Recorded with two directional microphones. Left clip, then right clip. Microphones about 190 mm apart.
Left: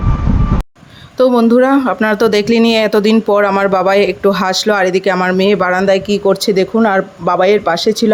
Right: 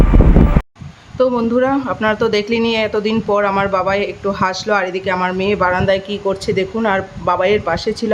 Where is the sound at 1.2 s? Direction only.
35° left (ahead or behind).